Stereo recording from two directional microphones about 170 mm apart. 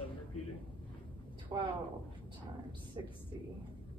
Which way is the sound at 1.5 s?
20° right (ahead or behind).